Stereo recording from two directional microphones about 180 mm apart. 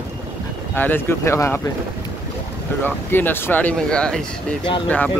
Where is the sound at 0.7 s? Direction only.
10° left (ahead or behind).